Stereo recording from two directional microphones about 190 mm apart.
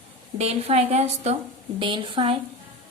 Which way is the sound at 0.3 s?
35° right (ahead or behind).